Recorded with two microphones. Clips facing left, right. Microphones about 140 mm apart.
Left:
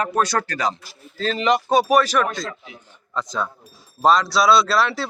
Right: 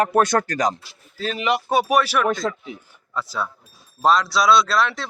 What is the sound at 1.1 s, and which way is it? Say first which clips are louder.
Speech: left 3 dB; 10° right (ahead or behind).